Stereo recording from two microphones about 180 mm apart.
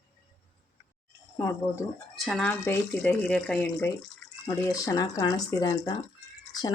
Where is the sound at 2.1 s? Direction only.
Centre (ahead or behind).